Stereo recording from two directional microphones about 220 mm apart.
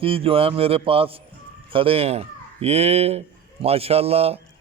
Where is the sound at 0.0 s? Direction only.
25° right (ahead or behind).